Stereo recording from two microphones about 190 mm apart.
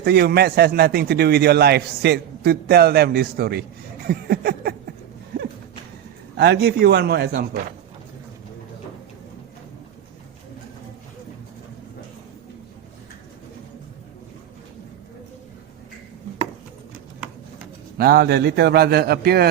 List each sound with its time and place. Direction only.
0.0 s a man's voice: 55° right (ahead or behind)
6.3 s a man's voice: 60° right (ahead or behind)
17.9 s a man's voice: 55° right (ahead or behind)